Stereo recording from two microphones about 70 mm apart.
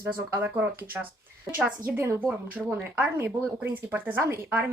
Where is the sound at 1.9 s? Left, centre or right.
Right.